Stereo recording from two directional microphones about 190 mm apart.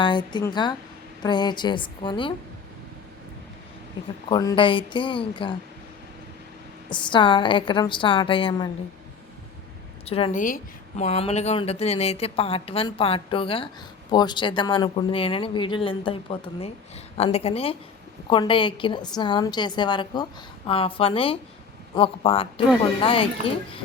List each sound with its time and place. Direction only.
0.0 s a woman's voice: 25° left (ahead or behind)
4.3 s a woman's voice: 25° left (ahead or behind)
6.9 s a woman's voice: 25° left (ahead or behind)
10.1 s a woman's voice: 30° left (ahead or behind)
10.3 s a woman's voice: 45° left (ahead or behind); by 23.3 s 30° left (ahead or behind)